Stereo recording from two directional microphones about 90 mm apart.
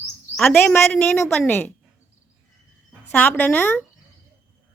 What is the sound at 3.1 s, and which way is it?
Speech, 20° left (ahead or behind).